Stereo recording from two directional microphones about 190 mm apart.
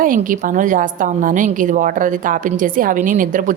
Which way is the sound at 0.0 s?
45° right (ahead or behind).